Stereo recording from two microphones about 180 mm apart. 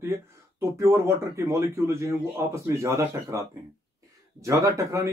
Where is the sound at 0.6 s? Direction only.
15° right (ahead or behind).